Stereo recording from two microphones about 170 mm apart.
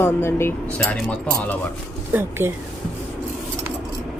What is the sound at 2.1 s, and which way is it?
Speech, 15° right (ahead or behind).